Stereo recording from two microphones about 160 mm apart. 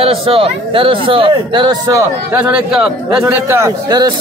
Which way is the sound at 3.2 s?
15° right (ahead or behind).